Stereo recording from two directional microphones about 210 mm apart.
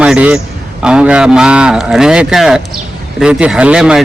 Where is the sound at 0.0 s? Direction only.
5° right (ahead or behind).